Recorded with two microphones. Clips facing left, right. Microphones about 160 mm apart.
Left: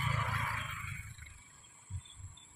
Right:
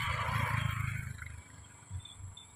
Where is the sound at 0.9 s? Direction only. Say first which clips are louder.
Right 7 dB; 80° right.